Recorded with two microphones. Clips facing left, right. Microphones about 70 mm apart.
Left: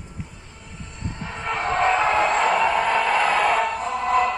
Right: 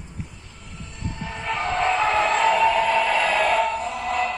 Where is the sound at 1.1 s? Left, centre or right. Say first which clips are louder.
Even; left.